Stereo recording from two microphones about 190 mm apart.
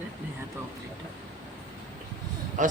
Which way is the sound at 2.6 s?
40° right (ahead or behind).